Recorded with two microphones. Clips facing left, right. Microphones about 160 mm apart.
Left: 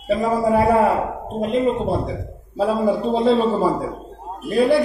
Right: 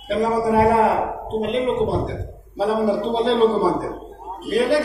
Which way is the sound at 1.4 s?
90° right.